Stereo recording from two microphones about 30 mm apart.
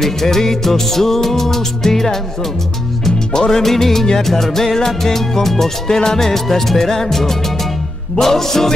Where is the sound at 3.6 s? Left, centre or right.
Centre.